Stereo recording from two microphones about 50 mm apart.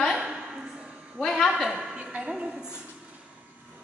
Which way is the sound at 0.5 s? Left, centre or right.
Centre.